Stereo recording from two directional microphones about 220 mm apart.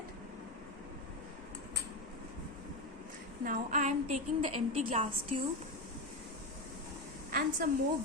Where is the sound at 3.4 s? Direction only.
35° right (ahead or behind).